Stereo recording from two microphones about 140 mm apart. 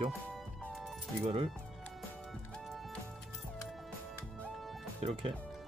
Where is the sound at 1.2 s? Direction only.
45° right (ahead or behind).